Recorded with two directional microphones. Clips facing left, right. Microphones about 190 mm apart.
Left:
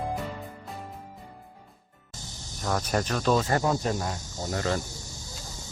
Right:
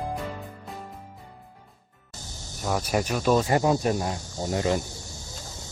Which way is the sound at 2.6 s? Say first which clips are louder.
Right 2 dB; 10° right (ahead or behind).